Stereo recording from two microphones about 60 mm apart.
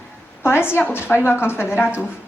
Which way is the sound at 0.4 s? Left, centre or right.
Left.